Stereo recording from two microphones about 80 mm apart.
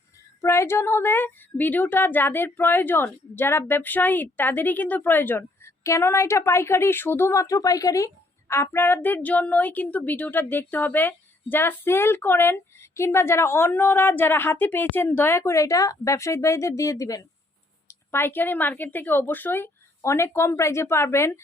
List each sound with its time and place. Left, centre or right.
0.4 s speech: left
8.4 s speech: left
18.1 s speech: left
20.0 s speech: left